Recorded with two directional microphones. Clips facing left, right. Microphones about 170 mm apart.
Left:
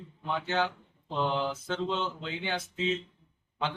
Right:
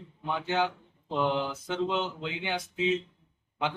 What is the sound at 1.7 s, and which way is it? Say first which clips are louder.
Speech: right 2 dB; 15° right (ahead or behind).